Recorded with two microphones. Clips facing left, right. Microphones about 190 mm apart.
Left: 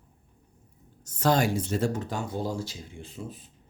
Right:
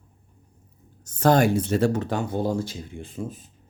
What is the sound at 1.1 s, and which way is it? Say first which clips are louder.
Speech: right 5 dB; 55° right (ahead or behind).